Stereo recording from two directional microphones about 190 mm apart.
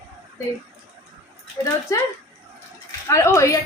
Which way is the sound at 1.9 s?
15° left (ahead or behind).